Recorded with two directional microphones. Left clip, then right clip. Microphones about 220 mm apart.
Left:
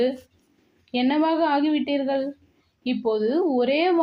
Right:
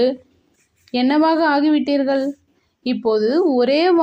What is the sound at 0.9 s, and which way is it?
Speech, 30° right (ahead or behind).